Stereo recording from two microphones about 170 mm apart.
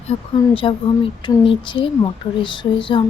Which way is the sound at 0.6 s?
30° left (ahead or behind).